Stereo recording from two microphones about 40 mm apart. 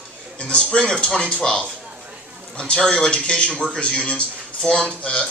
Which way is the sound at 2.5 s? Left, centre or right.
Left.